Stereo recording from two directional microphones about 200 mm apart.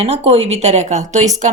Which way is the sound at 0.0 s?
30° right (ahead or behind).